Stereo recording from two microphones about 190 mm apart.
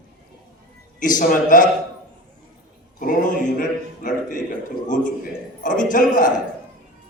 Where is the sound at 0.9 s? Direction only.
45° left (ahead or behind).